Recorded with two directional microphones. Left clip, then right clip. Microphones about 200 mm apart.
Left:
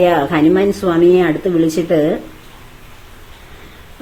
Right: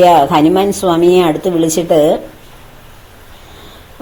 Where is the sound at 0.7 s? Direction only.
10° left (ahead or behind).